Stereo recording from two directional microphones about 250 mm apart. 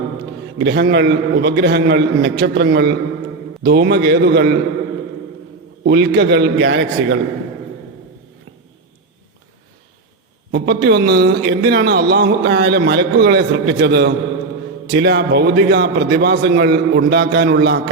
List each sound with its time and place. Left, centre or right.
0.6 s a man's voice: right
5.8 s a man's voice: right
10.5 s a man's voice: right